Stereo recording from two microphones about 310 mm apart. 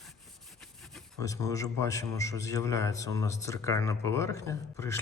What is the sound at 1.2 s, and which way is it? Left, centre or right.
Speech, centre.